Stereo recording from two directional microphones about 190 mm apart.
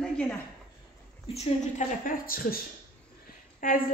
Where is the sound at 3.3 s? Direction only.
50° left (ahead or behind).